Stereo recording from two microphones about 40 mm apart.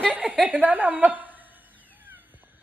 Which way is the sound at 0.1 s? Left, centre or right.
Right.